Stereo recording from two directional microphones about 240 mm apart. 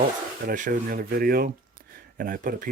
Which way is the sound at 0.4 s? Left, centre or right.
Right.